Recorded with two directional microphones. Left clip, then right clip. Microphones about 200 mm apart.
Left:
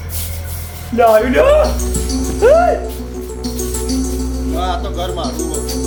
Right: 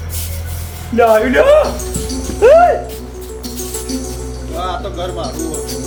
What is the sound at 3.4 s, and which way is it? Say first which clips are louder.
Music: left 3 dB; 5° left (ahead or behind).